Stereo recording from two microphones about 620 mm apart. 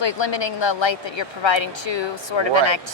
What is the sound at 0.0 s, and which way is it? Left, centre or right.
Speech, left.